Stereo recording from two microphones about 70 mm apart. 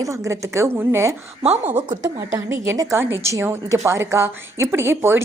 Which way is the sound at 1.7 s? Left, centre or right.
Right.